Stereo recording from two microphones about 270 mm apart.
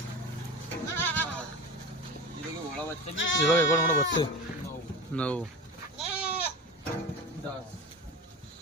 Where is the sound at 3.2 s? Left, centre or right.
Left.